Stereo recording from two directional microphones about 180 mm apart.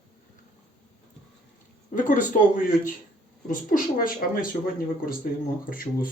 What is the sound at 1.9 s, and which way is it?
Speech, 45° left (ahead or behind).